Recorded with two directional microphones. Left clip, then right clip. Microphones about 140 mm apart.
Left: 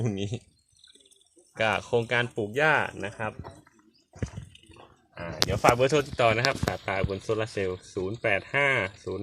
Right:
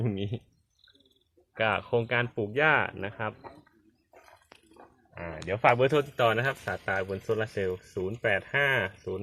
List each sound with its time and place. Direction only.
0.0 s speech: 5° left (ahead or behind)
1.5 s speech: 5° left (ahead or behind)
4.7 s a sound: 5° right (ahead or behind)
5.8 s speech: centre (ahead or behind)
6.1 s speech: 15° left (ahead or behind)
8.2 s speech: 30° left (ahead or behind)